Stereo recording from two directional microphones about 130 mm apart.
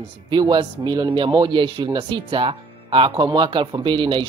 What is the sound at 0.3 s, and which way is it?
Speech, 35° right (ahead or behind).